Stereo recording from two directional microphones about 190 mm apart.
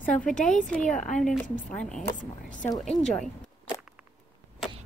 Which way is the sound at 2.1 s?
40° left (ahead or behind).